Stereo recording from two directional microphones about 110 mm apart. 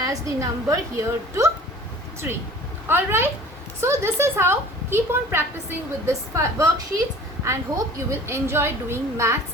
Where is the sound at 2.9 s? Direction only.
20° right (ahead or behind).